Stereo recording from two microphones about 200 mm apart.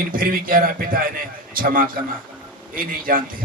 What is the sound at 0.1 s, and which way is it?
A man's voice, 45° right (ahead or behind).